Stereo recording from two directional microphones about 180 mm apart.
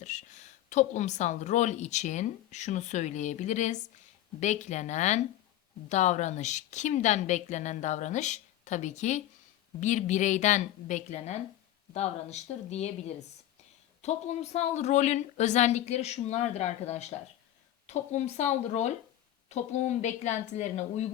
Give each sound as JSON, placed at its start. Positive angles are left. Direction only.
{"t": 0.0, "sound": "speech", "side_deg": 40}
{"t": 14.0, "sound": "speech", "side_deg": 35}